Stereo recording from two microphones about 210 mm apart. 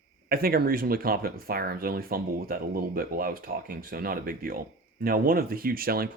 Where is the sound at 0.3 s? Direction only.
45° right (ahead or behind).